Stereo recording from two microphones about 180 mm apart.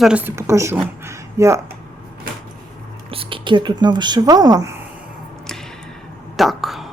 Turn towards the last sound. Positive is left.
turn(degrees=0)  # may be behind; listen again after turning